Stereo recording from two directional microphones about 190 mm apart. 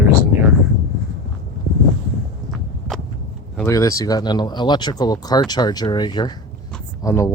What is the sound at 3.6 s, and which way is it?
Speech, 15° left (ahead or behind).